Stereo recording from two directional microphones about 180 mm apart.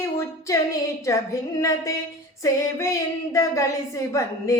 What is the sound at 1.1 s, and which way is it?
Speech, 15° left (ahead or behind).